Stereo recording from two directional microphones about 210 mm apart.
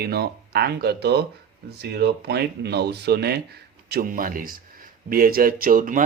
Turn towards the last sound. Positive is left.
turn(degrees=-40)  # may be behind; listen again after turning